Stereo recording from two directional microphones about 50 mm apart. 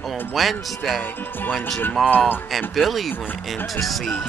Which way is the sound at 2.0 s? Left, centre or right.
Left.